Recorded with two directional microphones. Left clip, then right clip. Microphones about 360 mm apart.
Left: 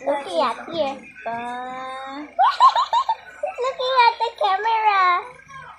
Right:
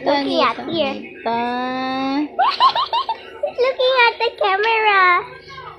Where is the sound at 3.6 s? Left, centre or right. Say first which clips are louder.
Right 3 dB; centre.